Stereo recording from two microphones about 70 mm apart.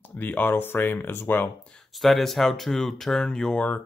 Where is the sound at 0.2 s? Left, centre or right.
Left.